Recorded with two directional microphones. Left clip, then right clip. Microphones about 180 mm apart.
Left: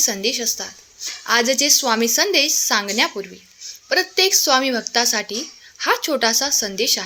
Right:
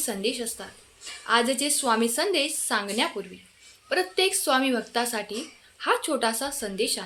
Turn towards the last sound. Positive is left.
turn(degrees=30)  # may be behind; listen again after turning